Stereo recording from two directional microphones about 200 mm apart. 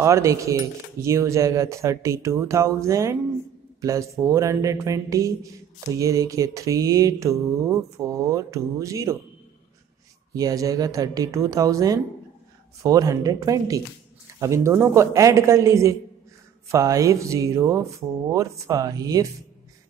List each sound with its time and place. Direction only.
0.0 s mantra: 15° right (ahead or behind)
10.3 s mantra: 15° right (ahead or behind)